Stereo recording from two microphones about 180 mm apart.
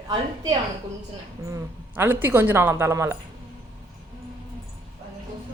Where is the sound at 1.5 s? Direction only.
10° right (ahead or behind).